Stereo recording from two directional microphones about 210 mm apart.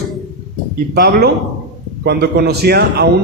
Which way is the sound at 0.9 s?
45° right (ahead or behind).